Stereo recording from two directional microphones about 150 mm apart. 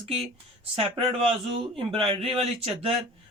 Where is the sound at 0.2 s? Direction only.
40° right (ahead or behind).